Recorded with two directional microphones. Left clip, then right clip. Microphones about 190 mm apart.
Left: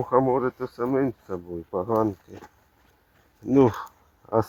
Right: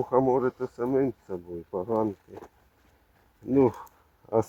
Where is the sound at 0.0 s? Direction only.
15° left (ahead or behind).